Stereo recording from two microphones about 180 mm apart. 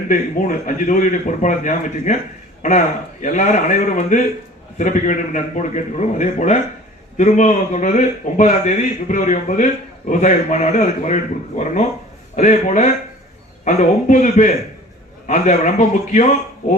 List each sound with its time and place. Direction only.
0.1 s a man's voice: 45° left (ahead or behind)